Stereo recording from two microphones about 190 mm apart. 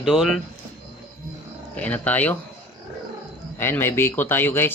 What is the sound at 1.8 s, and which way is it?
Speech, 10° left (ahead or behind).